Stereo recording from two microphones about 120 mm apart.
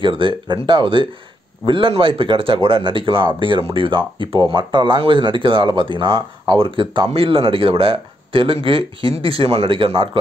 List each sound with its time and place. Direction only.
0.0 s speech: 45° right (ahead or behind)